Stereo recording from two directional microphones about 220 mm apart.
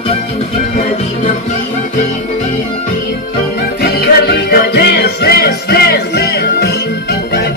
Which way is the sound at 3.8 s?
45° left (ahead or behind).